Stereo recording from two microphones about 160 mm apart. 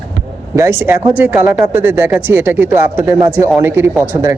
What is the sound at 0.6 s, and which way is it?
Speech, 15° right (ahead or behind).